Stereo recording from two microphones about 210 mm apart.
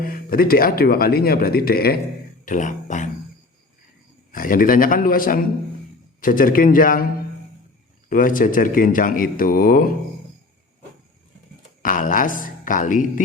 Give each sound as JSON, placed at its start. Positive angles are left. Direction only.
{"t": 0.0, "sound": "speech", "side_deg": 45}
{"t": 4.3, "sound": "speech", "side_deg": 40}
{"t": 8.1, "sound": "speech", "side_deg": 40}
{"t": 11.8, "sound": "speech", "side_deg": 40}